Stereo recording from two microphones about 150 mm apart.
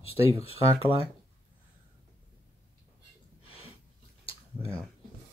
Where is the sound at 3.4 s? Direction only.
40° left (ahead or behind).